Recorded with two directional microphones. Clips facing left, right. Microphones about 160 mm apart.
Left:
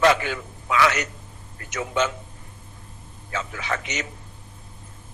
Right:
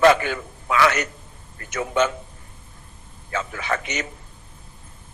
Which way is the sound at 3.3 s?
55° right (ahead or behind).